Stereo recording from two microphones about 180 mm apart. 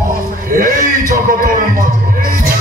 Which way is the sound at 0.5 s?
50° right (ahead or behind).